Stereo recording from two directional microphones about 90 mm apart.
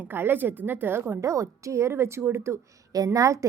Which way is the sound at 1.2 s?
35° right (ahead or behind).